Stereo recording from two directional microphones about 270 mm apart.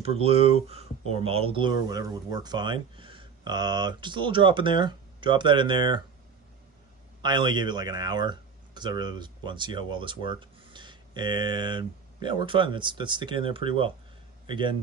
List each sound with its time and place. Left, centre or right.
0.0 s speech: right
7.2 s speech: centre